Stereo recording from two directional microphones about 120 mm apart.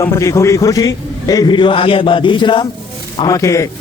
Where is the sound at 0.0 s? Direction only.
25° left (ahead or behind); by 2.6 s 40° left (ahead or behind).